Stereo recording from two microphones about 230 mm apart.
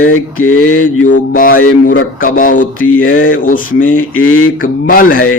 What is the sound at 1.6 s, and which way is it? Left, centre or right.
Mantra, left.